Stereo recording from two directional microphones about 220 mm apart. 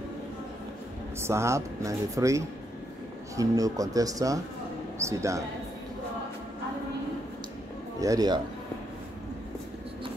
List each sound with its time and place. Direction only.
1.2 s speech: 10° right (ahead or behind)
8.0 s speech: 15° right (ahead or behind)